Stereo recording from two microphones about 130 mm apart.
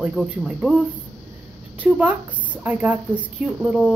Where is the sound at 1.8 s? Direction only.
10° right (ahead or behind).